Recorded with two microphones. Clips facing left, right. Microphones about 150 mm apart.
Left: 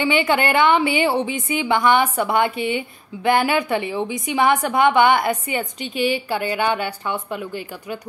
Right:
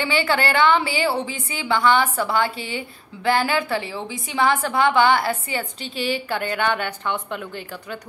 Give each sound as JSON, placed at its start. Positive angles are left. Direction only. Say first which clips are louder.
{"t": 0.0, "sound": "a woman's voice", "louder": "left 3 dB", "side_deg": 20}